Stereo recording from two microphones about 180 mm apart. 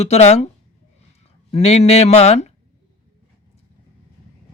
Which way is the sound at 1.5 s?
35° left (ahead or behind).